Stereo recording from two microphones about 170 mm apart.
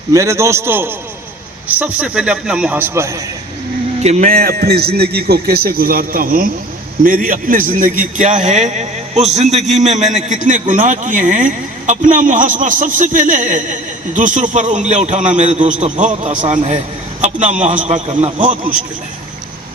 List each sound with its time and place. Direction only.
0.1 s a man's voice: 20° right (ahead or behind)
4.0 s a man's voice: 45° right (ahead or behind)